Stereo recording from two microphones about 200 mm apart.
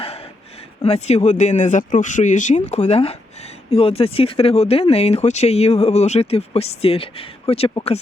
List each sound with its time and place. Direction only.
0.9 s speech: 35° left (ahead or behind)